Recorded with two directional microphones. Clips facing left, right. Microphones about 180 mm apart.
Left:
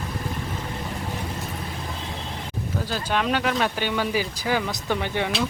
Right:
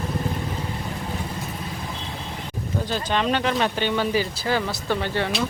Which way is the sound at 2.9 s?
5° left (ahead or behind).